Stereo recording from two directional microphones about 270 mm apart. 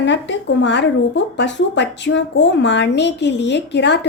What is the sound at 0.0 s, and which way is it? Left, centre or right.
Speech, left.